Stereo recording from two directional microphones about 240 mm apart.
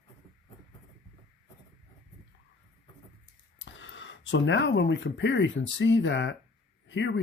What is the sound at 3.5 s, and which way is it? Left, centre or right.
Speech, left.